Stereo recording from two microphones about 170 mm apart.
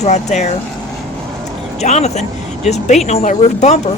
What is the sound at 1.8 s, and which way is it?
Speech, 40° left (ahead or behind).